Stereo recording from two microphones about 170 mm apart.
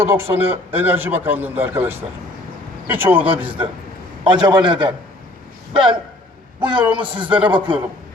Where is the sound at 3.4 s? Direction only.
30° right (ahead or behind).